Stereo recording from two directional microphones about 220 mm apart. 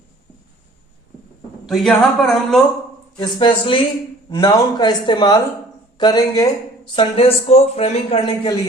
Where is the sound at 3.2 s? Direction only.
20° left (ahead or behind).